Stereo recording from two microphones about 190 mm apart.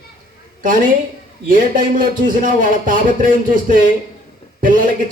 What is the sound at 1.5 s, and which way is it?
A man's voice, 45° right (ahead or behind).